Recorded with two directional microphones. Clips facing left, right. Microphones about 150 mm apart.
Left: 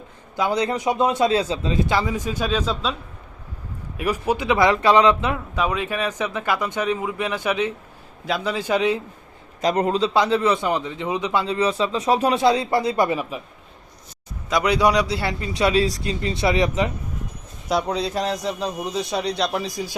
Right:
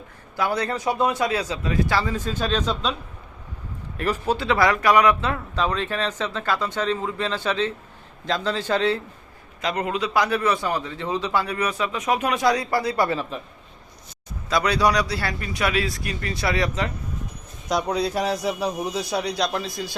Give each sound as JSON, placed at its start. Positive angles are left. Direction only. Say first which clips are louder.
{"t": 0.3, "sound": "speech", "louder": "left 3 dB", "side_deg": 20}
{"t": 3.9, "sound": "speech", "louder": "left 1 dB", "side_deg": 10}
{"t": 9.6, "sound": "a man's voice", "louder": "left 5 dB", "side_deg": 40}
{"t": 14.5, "sound": "a man's voice", "louder": "left 2 dB", "side_deg": 15}
{"t": 17.7, "sound": "a man's voice", "louder": "left 1 dB", "side_deg": 0}
{"t": 19.5, "sound": "speech", "louder": "left 2 dB", "side_deg": 15}